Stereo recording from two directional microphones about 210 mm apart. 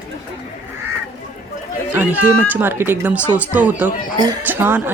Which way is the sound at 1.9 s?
10° right (ahead or behind).